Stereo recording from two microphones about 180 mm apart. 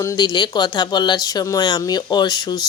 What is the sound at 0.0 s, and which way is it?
Speech, 20° left (ahead or behind).